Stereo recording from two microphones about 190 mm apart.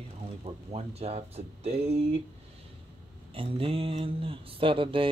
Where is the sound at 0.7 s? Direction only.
35° right (ahead or behind).